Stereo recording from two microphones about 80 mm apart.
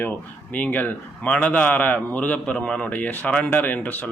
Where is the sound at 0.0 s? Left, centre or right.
Centre.